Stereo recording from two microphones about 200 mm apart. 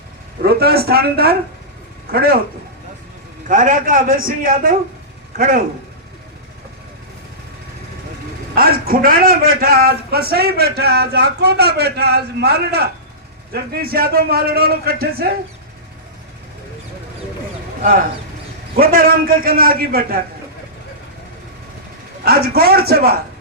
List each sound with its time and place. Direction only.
0.4 s a man's voice: 50° right (ahead or behind)
3.4 s a man's voice: 40° right (ahead or behind)
8.5 s a man's voice: 45° right (ahead or behind)
18.8 s a man's voice: 45° right (ahead or behind)
22.2 s a man's voice: 50° right (ahead or behind)